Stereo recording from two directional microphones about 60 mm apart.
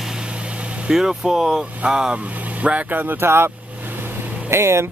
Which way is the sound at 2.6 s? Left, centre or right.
Right.